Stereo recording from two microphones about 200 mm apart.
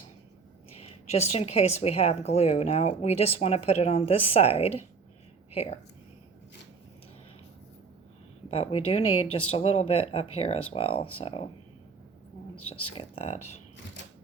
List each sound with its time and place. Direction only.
0.8 s a woman's voice: 30° left (ahead or behind)
8.4 s speech: 30° left (ahead or behind)
12.8 s a woman's voice: 30° left (ahead or behind)